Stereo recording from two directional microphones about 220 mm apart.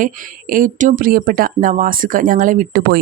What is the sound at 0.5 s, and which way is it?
A woman's voice, 35° right (ahead or behind).